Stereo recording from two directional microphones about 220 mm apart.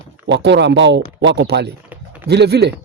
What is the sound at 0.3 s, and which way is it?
Speech, 55° right (ahead or behind).